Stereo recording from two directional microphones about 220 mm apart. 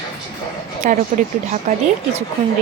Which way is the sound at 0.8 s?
35° right (ahead or behind).